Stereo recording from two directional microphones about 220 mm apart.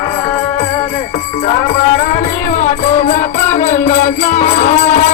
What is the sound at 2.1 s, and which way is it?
Music, 35° left (ahead or behind).